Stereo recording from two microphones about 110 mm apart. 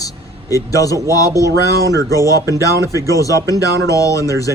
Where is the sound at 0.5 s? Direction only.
30° left (ahead or behind).